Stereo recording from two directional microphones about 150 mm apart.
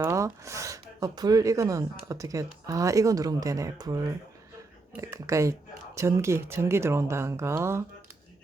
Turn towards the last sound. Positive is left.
turn(degrees=-20)  # may be behind; listen again after turning